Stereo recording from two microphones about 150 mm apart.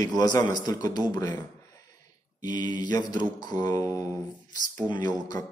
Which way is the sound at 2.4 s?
25° left (ahead or behind).